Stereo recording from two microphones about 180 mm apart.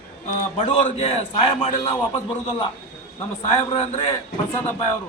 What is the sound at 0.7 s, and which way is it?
A man's voice, 35° left (ahead or behind).